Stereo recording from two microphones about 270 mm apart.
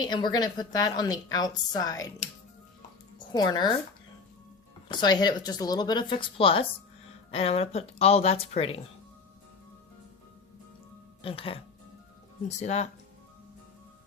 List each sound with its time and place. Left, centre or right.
0.0 s a woman's voice: centre
3.3 s a woman's voice: centre
4.9 s a woman's voice: centre
11.2 s speech: centre